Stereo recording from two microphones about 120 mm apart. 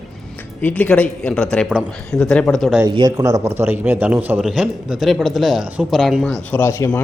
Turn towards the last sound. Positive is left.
turn(degrees=20)  # may be behind; listen again after turning